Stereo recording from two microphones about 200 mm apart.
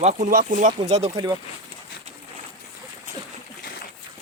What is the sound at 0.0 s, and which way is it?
Speech, 35° right (ahead or behind).